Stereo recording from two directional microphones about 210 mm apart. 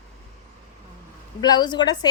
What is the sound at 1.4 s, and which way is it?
Speech, 20° left (ahead or behind).